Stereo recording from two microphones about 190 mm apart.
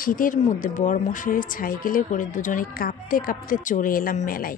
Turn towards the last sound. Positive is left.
turn(degrees=45)  # may be behind; listen again after turning